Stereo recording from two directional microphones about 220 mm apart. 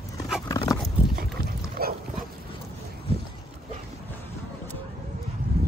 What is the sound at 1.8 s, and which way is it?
Dog, 45° right (ahead or behind).